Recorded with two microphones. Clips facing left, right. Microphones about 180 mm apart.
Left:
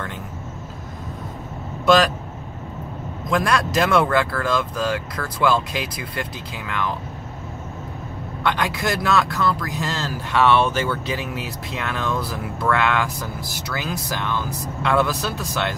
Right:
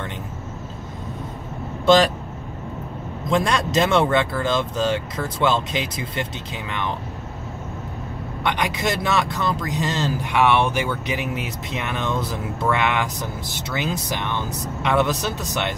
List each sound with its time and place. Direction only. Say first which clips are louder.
3.3 s speech: even; 25° right (ahead or behind)
8.5 s speech: even; 15° right (ahead or behind)